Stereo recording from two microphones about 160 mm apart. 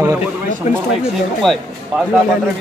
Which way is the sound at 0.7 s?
40° left (ahead or behind).